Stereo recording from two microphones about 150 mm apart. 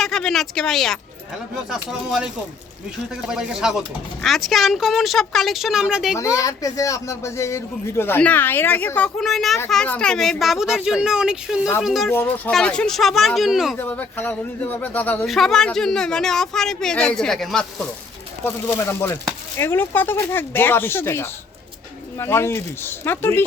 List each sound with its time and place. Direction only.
0.0 s speech: 5° left (ahead or behind)
6.1 s speech: 20° left (ahead or behind); by 12.1 s centre (ahead or behind)
12.1 s speech: 10° left (ahead or behind)
13.7 s speech: 10° left (ahead or behind)
18.4 s speech: 15° left (ahead or behind)